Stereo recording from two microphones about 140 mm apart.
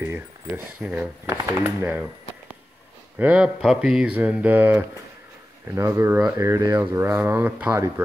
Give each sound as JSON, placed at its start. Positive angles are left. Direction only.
{"t": 0.0, "sound": "speech", "side_deg": -15}
{"t": 3.2, "sound": "speech", "side_deg": -10}